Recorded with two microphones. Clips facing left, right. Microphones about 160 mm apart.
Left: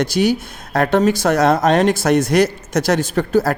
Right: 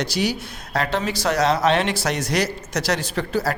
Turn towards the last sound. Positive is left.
turn(degrees=50)  # may be behind; listen again after turning